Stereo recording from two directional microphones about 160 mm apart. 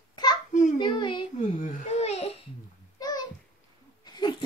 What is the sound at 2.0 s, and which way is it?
Babbling, 40° left (ahead or behind).